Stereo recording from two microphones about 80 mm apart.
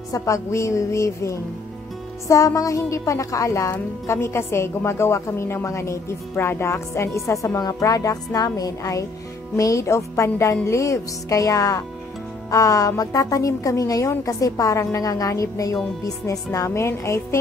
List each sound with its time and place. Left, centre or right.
0.1 s a woman's voice: left